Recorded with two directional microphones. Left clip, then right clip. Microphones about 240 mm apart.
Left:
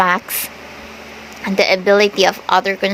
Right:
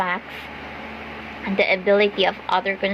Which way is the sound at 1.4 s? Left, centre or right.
Left.